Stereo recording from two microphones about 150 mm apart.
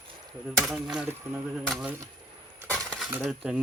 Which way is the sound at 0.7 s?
Centre (ahead or behind).